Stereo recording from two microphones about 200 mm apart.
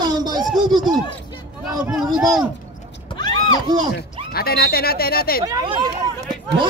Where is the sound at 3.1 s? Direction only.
20° left (ahead or behind).